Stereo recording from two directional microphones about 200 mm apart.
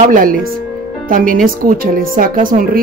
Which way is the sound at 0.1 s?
45° right (ahead or behind).